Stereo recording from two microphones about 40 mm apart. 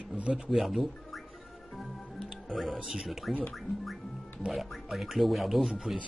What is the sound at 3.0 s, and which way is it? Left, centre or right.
Speech, centre.